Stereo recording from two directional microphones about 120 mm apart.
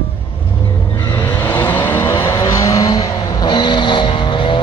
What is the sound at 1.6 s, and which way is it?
Vehicle, 15° left (ahead or behind).